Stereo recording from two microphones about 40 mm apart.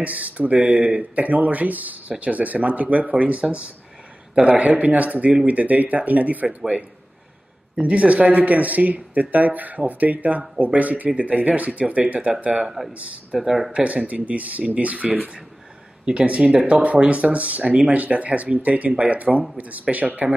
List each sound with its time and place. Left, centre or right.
0.0 s speech: right
7.7 s speech: right
12.6 s speech: centre
13.7 s speech: right